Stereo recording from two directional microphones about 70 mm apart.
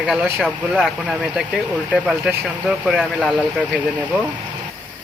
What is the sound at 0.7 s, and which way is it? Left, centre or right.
Speech, centre.